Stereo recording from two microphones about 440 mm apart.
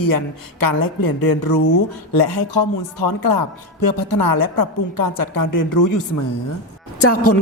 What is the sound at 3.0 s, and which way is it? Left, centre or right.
A woman's voice, left.